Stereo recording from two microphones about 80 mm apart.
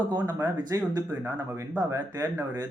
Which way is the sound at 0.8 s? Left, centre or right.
Right.